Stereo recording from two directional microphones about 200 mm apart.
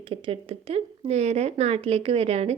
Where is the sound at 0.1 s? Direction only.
25° right (ahead or behind).